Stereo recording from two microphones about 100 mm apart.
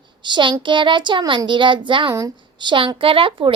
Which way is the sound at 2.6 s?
55° right (ahead or behind).